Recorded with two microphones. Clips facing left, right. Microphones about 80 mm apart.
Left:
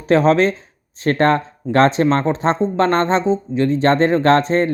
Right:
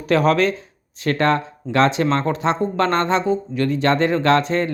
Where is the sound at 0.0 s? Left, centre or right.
Left.